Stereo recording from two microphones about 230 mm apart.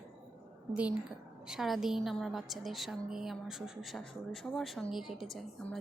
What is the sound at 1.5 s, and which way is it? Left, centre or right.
A woman's voice, centre.